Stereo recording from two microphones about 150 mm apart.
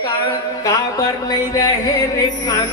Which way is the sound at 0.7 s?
25° left (ahead or behind).